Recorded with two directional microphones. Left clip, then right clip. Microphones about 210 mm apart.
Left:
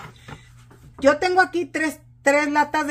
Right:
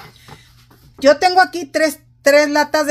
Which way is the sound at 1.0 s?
50° right (ahead or behind).